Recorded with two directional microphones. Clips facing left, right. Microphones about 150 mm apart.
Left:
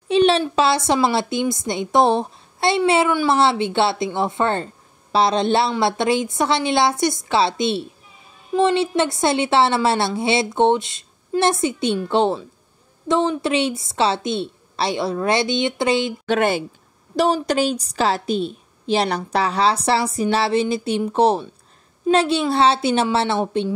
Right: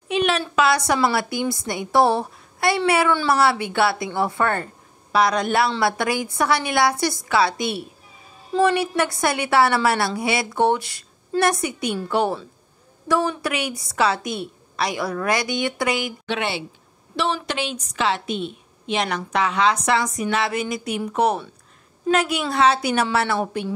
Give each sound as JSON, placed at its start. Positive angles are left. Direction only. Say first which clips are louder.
{"t": 0.1, "sound": "a sound", "louder": "left 6 dB", "side_deg": 30}
{"t": 0.4, "sound": "a woman's voice", "louder": "left 1 dB", "side_deg": 25}
{"t": 16.3, "sound": "a woman's voice", "louder": "left 8 dB", "side_deg": 45}